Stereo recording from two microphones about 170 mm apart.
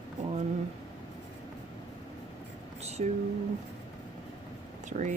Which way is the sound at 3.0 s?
40° right (ahead or behind).